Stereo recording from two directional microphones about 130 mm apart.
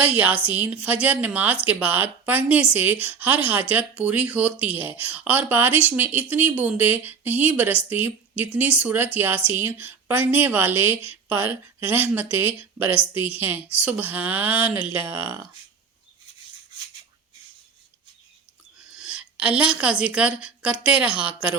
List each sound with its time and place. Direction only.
0.0 s speech: 15° right (ahead or behind)
18.9 s a woman's voice: 5° right (ahead or behind)